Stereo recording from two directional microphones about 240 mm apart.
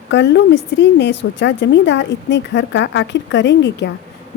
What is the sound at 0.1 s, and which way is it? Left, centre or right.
A woman's voice, left.